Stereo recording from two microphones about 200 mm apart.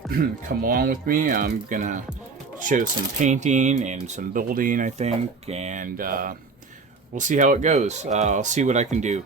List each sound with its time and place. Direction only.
0.1 s speech: 45° right (ahead or behind)